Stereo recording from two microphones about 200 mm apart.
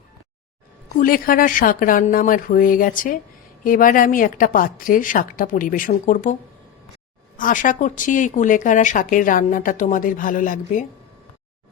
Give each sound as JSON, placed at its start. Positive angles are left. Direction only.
{"t": 0.9, "sound": "a woman's voice", "side_deg": 45}
{"t": 7.3, "sound": "a woman's voice", "side_deg": 40}